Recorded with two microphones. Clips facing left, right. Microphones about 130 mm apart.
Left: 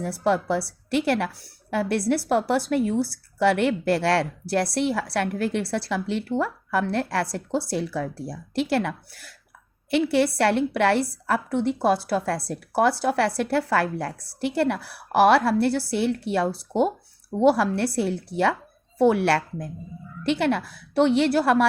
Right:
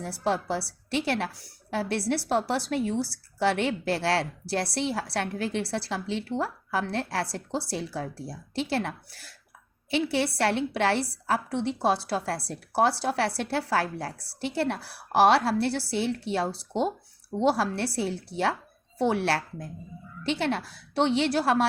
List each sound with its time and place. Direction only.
0.0 s a woman's voice: 55° left (ahead or behind)